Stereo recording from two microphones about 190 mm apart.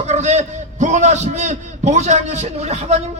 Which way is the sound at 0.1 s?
35° right (ahead or behind).